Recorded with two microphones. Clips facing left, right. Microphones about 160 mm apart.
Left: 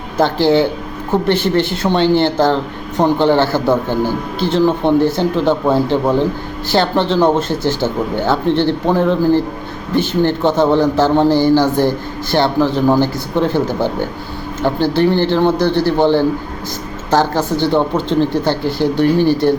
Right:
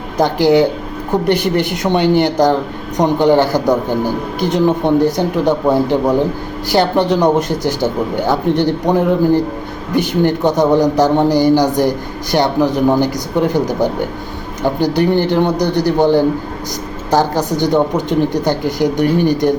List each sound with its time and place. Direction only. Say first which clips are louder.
0.2 s a man's voice: right 1 dB; 15° right (ahead or behind)